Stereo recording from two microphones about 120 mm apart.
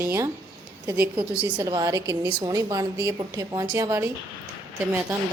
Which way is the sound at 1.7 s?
30° right (ahead or behind).